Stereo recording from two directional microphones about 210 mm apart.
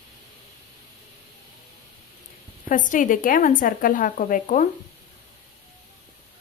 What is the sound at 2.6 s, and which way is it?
A woman's voice, 40° left (ahead or behind).